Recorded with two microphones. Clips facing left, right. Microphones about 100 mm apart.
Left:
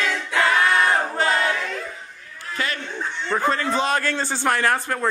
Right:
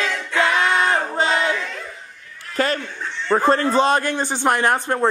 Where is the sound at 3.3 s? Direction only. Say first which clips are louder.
Right 5 dB; 35° right (ahead or behind).